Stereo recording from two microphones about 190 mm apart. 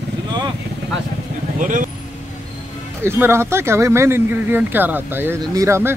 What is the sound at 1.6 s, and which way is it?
Speech, 45° right (ahead or behind).